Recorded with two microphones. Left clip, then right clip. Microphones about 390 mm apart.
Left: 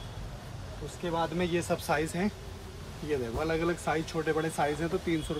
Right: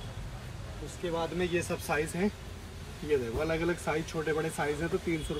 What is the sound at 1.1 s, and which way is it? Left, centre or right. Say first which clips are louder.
Speech: left 1 dB; centre.